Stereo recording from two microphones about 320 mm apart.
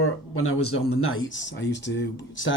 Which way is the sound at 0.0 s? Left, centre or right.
Left.